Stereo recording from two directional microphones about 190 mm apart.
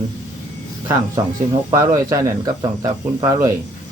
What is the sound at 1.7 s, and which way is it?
Cricket, 15° right (ahead or behind).